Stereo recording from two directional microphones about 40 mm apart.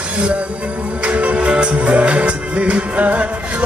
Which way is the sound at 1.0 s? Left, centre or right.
Right.